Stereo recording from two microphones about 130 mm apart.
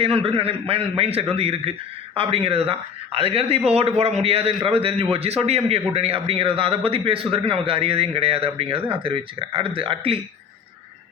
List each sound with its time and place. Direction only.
0.0 s a man's voice: 45° right (ahead or behind)